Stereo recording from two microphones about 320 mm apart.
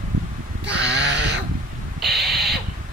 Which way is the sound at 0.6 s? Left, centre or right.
Right.